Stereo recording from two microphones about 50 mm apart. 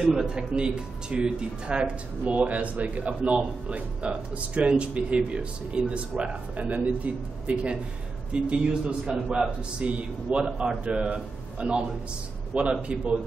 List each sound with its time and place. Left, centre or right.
0.0 s speech: centre